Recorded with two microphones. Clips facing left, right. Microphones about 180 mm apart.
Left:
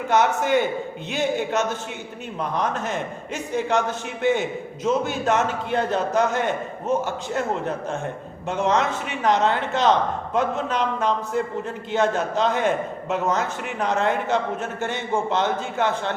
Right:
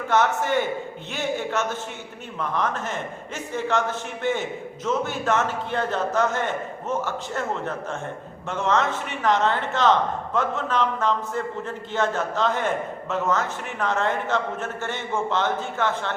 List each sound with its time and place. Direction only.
0.1 s a man's voice: 15° left (ahead or behind)
8.4 s a man's voice: 15° left (ahead or behind)